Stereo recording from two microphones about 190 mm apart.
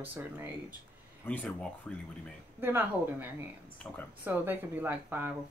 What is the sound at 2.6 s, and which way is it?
Speech, 10° right (ahead or behind).